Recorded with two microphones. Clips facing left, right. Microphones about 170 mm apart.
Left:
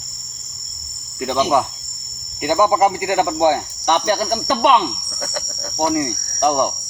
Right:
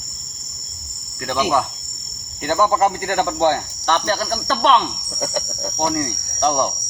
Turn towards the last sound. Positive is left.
turn(degrees=10)  # may be behind; listen again after turning